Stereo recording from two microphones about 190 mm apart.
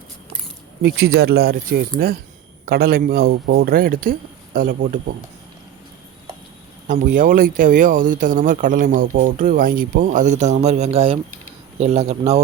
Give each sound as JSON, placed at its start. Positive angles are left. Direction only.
{"t": 0.8, "sound": "speech", "side_deg": -55}
{"t": 6.8, "sound": "speech", "side_deg": -45}